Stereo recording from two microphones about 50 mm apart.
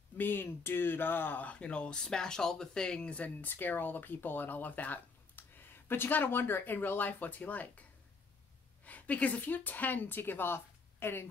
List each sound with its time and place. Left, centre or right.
0.2 s speech: left; by 3.2 s centre
3.4 s speech: left
8.8 s a woman's voice: left